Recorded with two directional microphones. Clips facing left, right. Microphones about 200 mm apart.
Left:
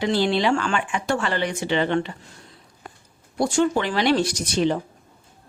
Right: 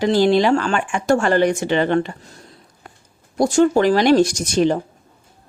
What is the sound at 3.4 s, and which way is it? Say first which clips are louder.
Speech: right 6 dB; 40° right (ahead or behind).